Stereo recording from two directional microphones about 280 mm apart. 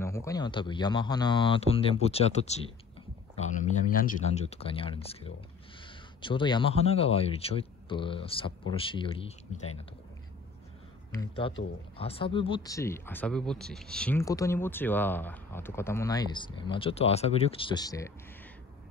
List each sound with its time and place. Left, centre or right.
0.0 s speech: centre
11.1 s speech: centre